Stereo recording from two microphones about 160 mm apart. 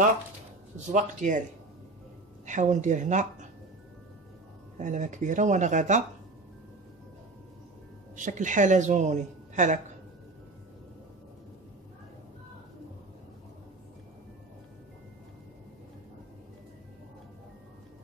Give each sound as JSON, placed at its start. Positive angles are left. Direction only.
{"t": 0.9, "sound": "a woman's voice", "side_deg": -50}
{"t": 2.4, "sound": "a woman's voice", "side_deg": -50}
{"t": 4.7, "sound": "a woman's voice", "side_deg": -50}
{"t": 8.2, "sound": "a woman's voice", "side_deg": -55}